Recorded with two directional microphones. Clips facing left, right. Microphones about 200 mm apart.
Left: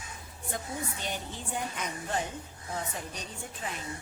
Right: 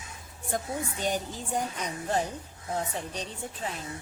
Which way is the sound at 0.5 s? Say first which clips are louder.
Right 5 dB; 45° right (ahead or behind).